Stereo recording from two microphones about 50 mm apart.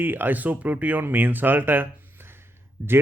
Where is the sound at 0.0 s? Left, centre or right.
Right.